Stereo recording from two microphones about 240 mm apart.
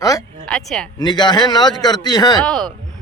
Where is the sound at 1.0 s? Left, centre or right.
Centre.